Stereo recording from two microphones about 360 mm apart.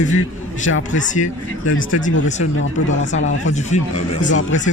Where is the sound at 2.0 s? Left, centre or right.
Left.